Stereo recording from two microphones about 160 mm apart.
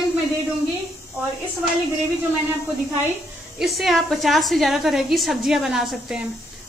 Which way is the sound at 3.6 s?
Centre (ahead or behind).